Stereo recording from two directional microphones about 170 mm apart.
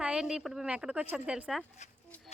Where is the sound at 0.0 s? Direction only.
5° right (ahead or behind).